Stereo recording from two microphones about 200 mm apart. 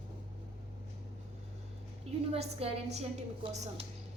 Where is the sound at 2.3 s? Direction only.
30° right (ahead or behind).